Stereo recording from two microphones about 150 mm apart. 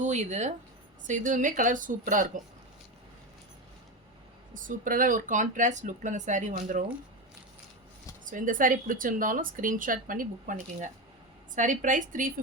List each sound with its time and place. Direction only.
0.0 s a woman's voice: 55° right (ahead or behind)
4.5 s a woman's voice: 60° right (ahead or behind)
8.2 s a woman's voice: 60° right (ahead or behind)